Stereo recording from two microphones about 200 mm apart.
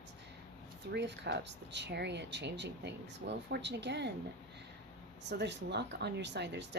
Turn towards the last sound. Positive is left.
turn(degrees=-60)  # may be behind; listen again after turning